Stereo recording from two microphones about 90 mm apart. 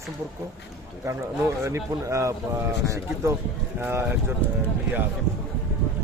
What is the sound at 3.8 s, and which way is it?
Speech, 25° right (ahead or behind).